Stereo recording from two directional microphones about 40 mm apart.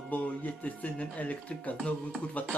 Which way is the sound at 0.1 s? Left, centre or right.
Left.